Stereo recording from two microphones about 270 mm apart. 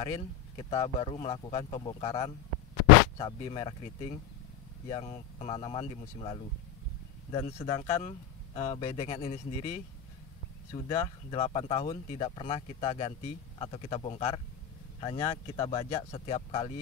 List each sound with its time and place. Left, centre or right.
0.0 s speech: centre
10.7 s speech: centre
11.3 s speech: left